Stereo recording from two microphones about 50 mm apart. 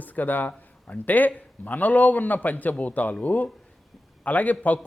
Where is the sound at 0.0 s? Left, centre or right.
Left.